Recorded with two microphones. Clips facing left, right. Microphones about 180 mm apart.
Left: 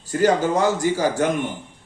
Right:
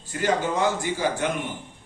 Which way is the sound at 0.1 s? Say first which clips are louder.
Left 6 dB; 40° left (ahead or behind).